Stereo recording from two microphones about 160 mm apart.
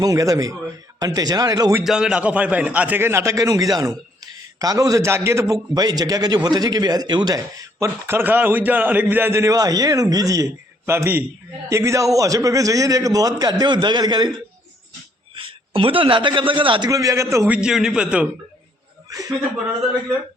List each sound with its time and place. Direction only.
0.0 s a man's voice: 20° right (ahead or behind)
1.8 s a man's voice: 5° right (ahead or behind); by 14.3 s 25° right (ahead or behind)
15.4 s a man's voice: 35° right (ahead or behind); by 17.6 s 15° right (ahead or behind)
17.6 s a man's voice: 5° right (ahead or behind)
19.0 s chuckle: 20° right (ahead or behind)